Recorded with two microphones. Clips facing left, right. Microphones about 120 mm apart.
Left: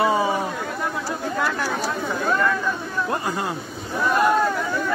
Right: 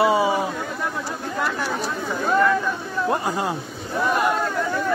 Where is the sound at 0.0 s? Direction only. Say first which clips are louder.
Right 2 dB; 10° right (ahead or behind).